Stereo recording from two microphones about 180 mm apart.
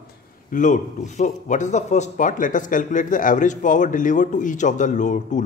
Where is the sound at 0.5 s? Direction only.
45° left (ahead or behind).